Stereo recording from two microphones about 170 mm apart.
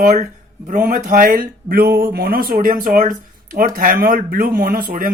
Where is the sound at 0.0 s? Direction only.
45° right (ahead or behind).